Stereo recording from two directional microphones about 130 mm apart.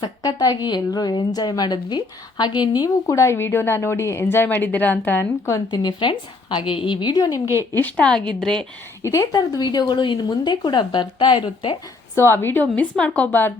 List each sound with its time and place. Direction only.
0.0 s a woman's voice: 30° left (ahead or behind)
7.7 s a woman's voice: 15° left (ahead or behind)
9.0 s speech: 25° left (ahead or behind); by 11.8 s 45° left (ahead or behind)
12.1 s a woman's voice: 20° left (ahead or behind)